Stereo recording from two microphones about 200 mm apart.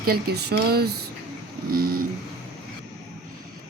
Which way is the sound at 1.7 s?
45° right (ahead or behind).